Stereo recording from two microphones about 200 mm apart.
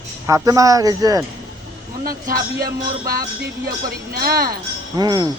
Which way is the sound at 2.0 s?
45° right (ahead or behind).